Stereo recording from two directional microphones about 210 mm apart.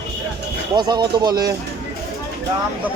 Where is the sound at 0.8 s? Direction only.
20° right (ahead or behind).